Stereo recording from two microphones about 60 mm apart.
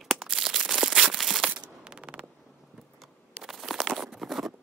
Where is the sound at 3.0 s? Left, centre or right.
Centre.